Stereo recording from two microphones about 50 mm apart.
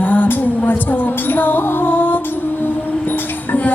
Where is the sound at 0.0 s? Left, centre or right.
Left.